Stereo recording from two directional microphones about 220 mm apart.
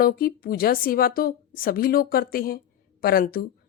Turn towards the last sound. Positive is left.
turn(degrees=40)  # may be behind; listen again after turning